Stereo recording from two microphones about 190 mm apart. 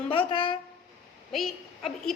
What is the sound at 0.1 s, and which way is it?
Speech, 25° left (ahead or behind).